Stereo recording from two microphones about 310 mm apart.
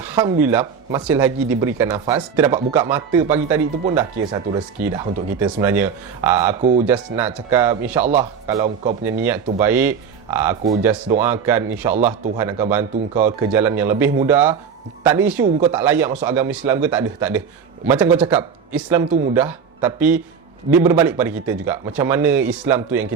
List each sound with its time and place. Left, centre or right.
0.1 s speech: centre
4.8 s speech: centre
6.6 s a man's voice: right
6.8 s a man's voice: centre
9.6 s speech: centre